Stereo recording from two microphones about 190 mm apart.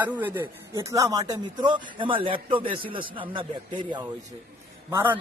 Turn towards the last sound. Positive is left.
turn(degrees=-15)  # may be behind; listen again after turning